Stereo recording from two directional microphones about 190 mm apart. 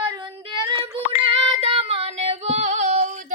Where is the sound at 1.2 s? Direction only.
30° right (ahead or behind).